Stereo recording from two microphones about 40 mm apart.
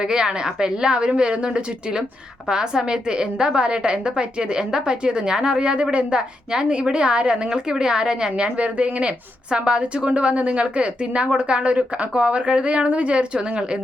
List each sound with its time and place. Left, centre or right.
0.0 s a woman's voice: centre
8.5 s a woman's voice: right